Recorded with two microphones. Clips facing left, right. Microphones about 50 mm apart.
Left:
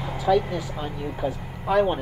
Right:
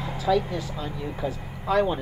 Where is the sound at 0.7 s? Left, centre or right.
Left.